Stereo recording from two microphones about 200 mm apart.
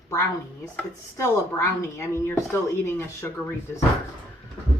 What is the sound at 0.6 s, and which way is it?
Chopping, 15° left (ahead or behind).